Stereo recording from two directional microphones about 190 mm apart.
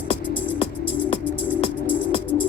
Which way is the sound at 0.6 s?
30° left (ahead or behind).